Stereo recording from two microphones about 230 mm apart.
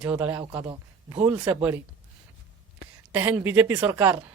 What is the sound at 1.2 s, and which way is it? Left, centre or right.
Speech, centre.